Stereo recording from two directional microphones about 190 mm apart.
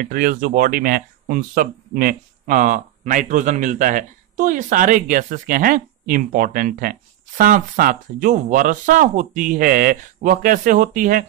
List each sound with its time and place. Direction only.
0.0 s speech: 50° right (ahead or behind)